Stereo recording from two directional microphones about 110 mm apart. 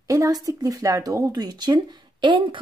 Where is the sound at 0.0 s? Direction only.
30° right (ahead or behind).